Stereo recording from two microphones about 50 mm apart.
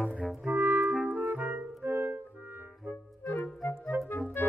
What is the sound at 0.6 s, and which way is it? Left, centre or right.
Clarinet, right.